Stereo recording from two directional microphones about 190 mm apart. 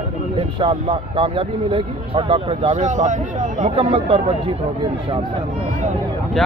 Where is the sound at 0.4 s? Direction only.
30° right (ahead or behind).